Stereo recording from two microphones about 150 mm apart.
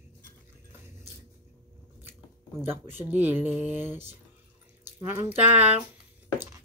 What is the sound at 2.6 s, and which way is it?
Speech, 15° right (ahead or behind).